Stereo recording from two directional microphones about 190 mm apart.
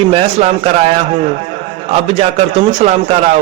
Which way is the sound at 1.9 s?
35° right (ahead or behind).